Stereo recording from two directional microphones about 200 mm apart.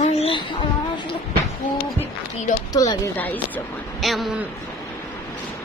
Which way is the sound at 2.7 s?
15° left (ahead or behind).